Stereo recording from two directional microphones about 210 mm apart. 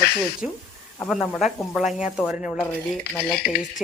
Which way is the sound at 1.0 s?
5° left (ahead or behind).